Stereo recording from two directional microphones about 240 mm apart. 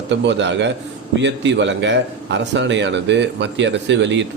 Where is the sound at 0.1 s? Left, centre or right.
Right.